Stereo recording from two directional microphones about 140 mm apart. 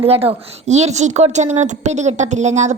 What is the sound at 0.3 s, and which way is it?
A woman's voice, 55° right (ahead or behind).